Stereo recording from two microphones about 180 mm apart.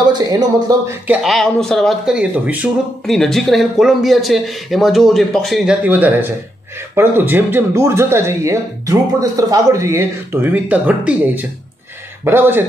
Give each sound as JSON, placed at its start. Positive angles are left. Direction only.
{"t": 0.1, "sound": "speech", "side_deg": -20}
{"t": 1.0, "sound": "speech", "side_deg": -5}